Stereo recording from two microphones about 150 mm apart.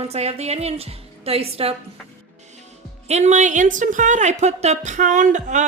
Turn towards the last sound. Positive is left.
turn(degrees=-55)  # may be behind; listen again after turning